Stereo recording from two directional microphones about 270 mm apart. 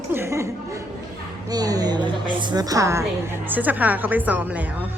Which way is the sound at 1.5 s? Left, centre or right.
Centre.